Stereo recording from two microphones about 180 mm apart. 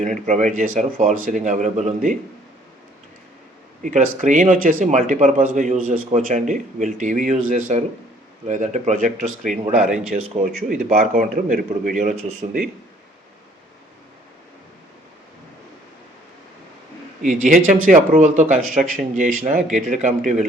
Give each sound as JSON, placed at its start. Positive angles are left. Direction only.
{"t": 0.0, "sound": "a man's voice", "side_deg": -45}
{"t": 3.8, "sound": "a man's voice", "side_deg": -45}
{"t": 17.4, "sound": "a man's voice", "side_deg": -45}